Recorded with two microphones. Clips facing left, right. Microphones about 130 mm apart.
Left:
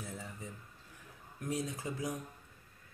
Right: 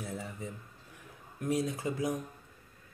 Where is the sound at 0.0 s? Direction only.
60° right (ahead or behind).